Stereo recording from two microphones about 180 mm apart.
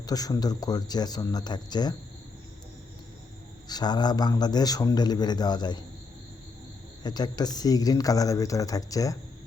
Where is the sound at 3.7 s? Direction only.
20° left (ahead or behind).